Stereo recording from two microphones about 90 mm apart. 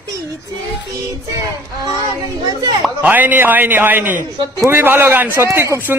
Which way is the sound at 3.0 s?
20° right (ahead or behind).